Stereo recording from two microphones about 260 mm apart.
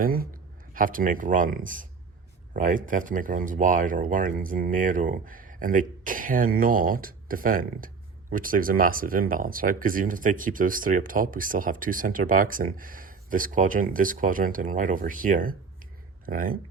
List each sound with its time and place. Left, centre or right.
0.0 s speech: right